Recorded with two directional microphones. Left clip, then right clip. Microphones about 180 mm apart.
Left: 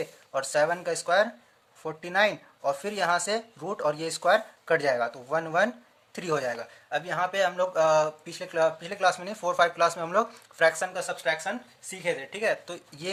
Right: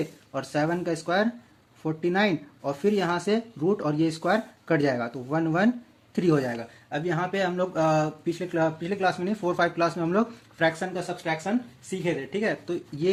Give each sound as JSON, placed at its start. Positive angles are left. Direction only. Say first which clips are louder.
{"t": 0.3, "sound": "speech", "louder": "left 2 dB", "side_deg": 15}